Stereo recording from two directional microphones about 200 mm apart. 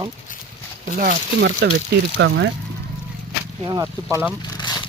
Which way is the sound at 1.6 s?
55° right (ahead or behind).